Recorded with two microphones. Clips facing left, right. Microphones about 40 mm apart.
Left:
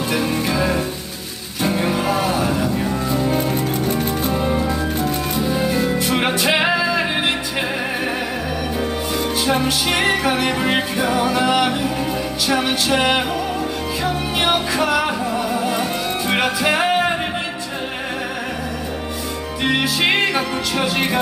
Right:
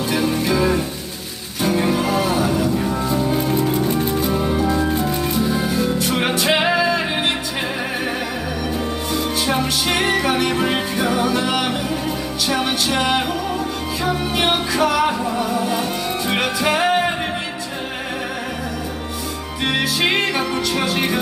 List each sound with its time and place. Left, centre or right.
0.1 s music: centre
1.8 s music: centre
6.2 s music: centre
6.7 s music: centre
9.5 s music: centre
14.8 s music: centre
15.6 s music: centre
20.0 s music: centre